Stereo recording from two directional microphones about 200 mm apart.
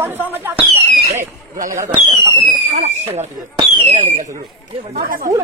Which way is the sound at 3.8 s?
35° right (ahead or behind).